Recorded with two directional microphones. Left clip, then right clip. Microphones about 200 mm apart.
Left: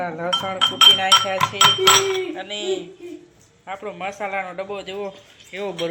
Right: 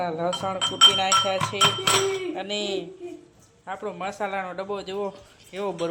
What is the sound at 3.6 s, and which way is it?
Speech, 5° right (ahead or behind).